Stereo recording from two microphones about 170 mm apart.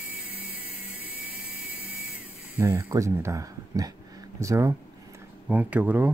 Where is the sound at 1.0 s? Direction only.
10° right (ahead or behind).